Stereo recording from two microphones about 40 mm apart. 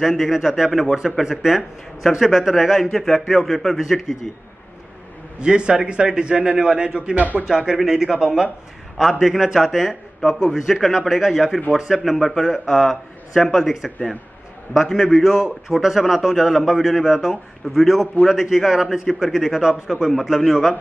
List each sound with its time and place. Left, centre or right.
0.2 s a man's voice: centre
2.8 s a man's voice: centre
5.4 s a man's voice: right
7.4 s a man's voice: centre
11.0 s a man's voice: centre
11.2 s a man's voice: centre
11.7 s a man's voice: centre
12.0 s a man's voice: centre
15.8 s a man's voice: centre